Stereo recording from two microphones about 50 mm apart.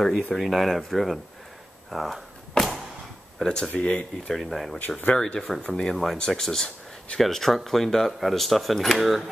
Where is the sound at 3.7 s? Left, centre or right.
Left.